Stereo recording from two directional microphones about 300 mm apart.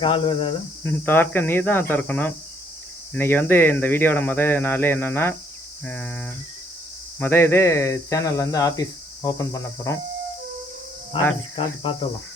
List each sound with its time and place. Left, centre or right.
0.0 s speech: centre
1.0 s speech: centre
5.8 s cricket: centre
7.2 s speech: centre
11.1 s speech: centre